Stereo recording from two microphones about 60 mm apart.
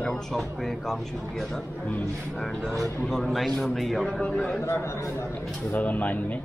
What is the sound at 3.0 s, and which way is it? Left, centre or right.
A man's voice, centre.